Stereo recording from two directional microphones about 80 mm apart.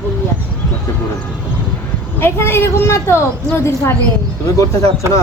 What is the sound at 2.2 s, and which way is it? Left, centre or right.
A woman's voice, left.